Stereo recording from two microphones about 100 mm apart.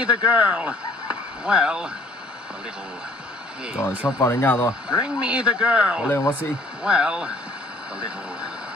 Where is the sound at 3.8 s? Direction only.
20° left (ahead or behind).